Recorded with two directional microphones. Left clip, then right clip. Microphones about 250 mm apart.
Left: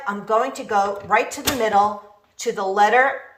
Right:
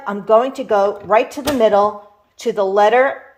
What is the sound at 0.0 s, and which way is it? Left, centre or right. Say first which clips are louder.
Speech: right 6 dB; right.